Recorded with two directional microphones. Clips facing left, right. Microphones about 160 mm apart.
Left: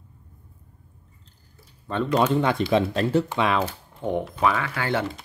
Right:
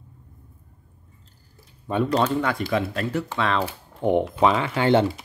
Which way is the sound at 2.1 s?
15° left (ahead or behind).